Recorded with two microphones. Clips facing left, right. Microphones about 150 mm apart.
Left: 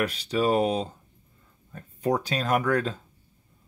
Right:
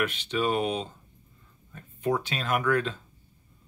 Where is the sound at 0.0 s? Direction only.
35° left (ahead or behind).